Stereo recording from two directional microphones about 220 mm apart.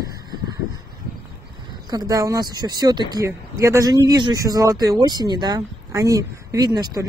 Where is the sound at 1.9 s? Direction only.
15° right (ahead or behind).